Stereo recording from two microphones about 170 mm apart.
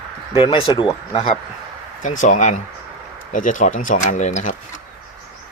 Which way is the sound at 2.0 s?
50° left (ahead or behind).